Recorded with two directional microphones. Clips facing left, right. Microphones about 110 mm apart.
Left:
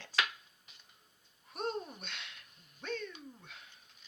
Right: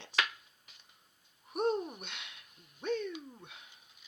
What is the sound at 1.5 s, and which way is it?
Speech, 15° right (ahead or behind).